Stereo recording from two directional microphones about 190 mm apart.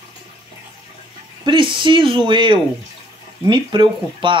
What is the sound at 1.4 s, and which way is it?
Speech, 25° right (ahead or behind).